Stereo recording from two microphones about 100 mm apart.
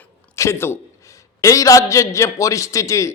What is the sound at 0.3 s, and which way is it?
A man's voice, 25° left (ahead or behind).